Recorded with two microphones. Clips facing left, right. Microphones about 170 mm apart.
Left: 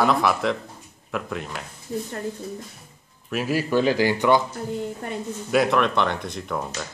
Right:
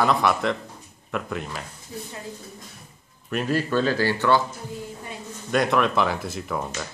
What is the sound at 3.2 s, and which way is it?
Speech, 5° left (ahead or behind).